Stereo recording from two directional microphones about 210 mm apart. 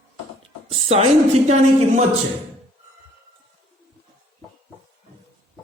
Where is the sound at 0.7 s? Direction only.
30° right (ahead or behind).